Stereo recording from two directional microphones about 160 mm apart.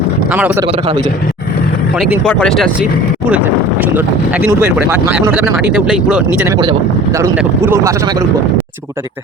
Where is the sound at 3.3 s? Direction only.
10° right (ahead or behind).